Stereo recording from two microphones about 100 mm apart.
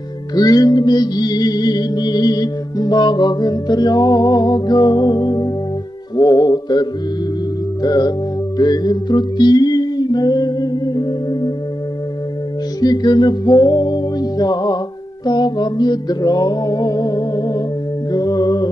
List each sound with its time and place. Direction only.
0.3 s music: 40° left (ahead or behind)
12.8 s music: 45° left (ahead or behind)
18.1 s mantra: 40° left (ahead or behind)